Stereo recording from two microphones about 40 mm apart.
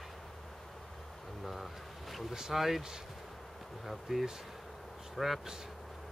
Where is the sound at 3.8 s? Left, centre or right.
Centre.